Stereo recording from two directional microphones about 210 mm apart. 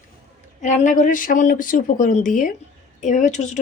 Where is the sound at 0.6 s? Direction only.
35° left (ahead or behind).